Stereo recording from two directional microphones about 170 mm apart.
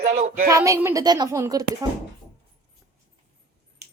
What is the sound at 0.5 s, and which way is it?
Speech, 20° right (ahead or behind).